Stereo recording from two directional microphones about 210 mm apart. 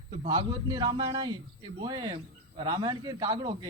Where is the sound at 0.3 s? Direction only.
20° right (ahead or behind).